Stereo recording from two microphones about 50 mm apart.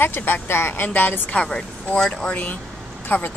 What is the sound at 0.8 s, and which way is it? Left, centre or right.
Speech, left.